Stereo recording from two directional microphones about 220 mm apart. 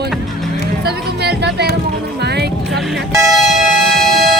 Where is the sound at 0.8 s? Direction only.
50° right (ahead or behind).